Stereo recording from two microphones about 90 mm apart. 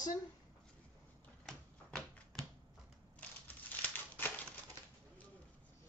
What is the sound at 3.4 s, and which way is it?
Crumpling, 20° left (ahead or behind).